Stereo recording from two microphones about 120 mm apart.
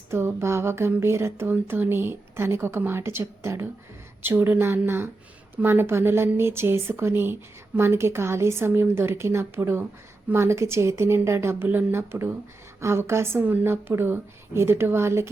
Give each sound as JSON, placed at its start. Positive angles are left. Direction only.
{"t": 0.1, "sound": "speech", "side_deg": -20}